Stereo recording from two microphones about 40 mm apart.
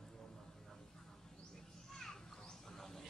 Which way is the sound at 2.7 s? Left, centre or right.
Centre.